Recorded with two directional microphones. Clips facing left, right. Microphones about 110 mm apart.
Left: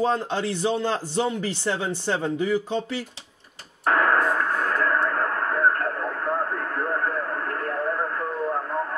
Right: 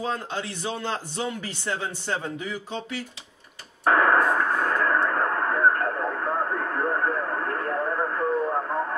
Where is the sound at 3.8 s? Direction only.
15° right (ahead or behind).